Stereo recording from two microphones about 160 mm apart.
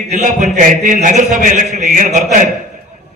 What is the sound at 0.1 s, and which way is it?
A man's voice, 50° right (ahead or behind).